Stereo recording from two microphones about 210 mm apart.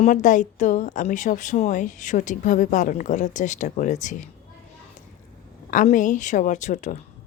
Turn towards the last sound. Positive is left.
turn(degrees=35)  # may be behind; listen again after turning